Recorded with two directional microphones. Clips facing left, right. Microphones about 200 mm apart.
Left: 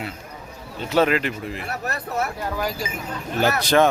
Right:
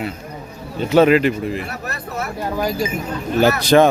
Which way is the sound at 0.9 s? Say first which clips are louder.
Right 7 dB; 5° right (ahead or behind).